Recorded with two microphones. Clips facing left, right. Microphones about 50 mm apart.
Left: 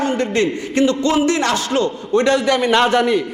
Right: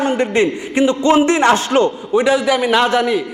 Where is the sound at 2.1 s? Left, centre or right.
Centre.